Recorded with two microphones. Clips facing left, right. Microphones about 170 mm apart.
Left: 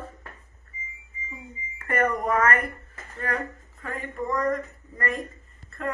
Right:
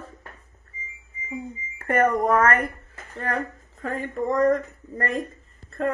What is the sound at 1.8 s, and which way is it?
Speech, 45° right (ahead or behind).